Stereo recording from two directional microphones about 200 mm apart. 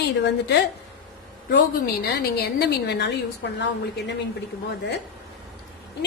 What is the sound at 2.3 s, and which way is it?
Speech, 55° left (ahead or behind).